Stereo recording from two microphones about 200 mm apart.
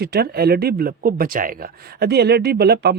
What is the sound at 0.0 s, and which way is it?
Speech, 50° right (ahead or behind).